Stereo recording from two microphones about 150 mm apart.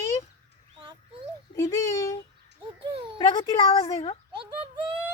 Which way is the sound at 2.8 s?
35° right (ahead or behind).